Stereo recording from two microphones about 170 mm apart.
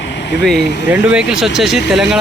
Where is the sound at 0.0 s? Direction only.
90° left.